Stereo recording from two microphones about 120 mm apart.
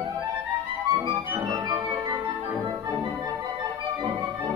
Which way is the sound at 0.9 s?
25° right (ahead or behind).